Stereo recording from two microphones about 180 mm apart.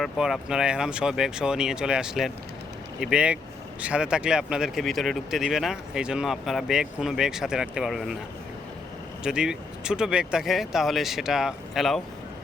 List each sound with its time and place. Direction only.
0.0 s speech: 5° right (ahead or behind)
9.2 s speech: 5° right (ahead or behind)